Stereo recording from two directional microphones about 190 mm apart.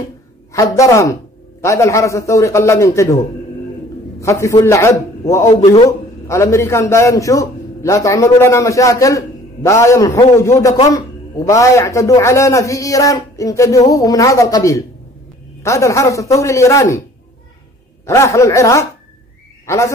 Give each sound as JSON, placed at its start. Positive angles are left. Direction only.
{"t": 0.5, "sound": "a man's voice", "side_deg": 15}
{"t": 4.2, "sound": "a man's voice", "side_deg": 15}
{"t": 18.0, "sound": "a man's voice", "side_deg": 15}